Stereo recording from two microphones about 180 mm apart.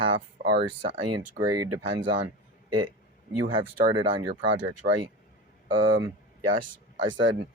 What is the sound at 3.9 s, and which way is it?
Speech, 25° right (ahead or behind).